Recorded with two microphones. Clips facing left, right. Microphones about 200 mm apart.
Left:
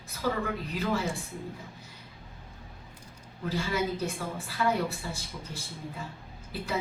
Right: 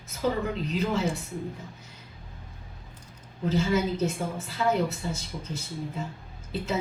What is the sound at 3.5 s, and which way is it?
A woman's voice, 20° right (ahead or behind).